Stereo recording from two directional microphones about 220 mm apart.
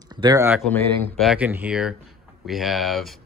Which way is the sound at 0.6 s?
10° left (ahead or behind).